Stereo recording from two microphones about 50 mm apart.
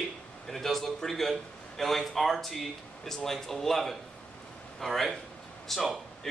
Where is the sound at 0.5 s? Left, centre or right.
Centre.